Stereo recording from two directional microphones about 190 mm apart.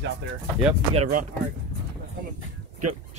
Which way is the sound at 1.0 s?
40° right (ahead or behind).